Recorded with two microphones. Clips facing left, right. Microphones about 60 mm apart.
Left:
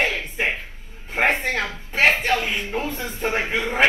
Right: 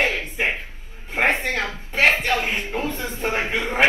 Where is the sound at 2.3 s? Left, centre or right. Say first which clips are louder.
Even; right.